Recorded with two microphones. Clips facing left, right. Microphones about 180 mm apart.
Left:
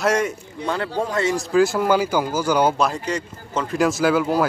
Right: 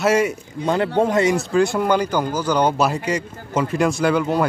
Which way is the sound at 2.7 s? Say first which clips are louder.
Right 2 dB; 5° right (ahead or behind).